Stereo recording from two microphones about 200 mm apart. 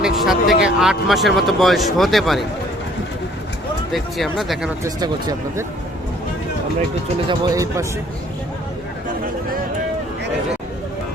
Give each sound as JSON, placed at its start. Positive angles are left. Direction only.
{"t": 0.0, "sound": "a sound", "side_deg": 0}
{"t": 0.6, "sound": "speech", "side_deg": 0}
{"t": 3.9, "sound": "speech", "side_deg": 0}
{"t": 4.8, "sound": "speech", "side_deg": -20}
{"t": 7.3, "sound": "speech", "side_deg": -20}